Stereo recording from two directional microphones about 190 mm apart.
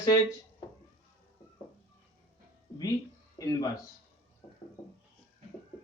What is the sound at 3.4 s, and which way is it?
Speech, 20° left (ahead or behind).